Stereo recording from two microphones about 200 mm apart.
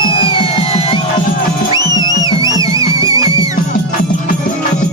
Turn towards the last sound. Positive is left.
turn(degrees=-20)  # may be behind; listen again after turning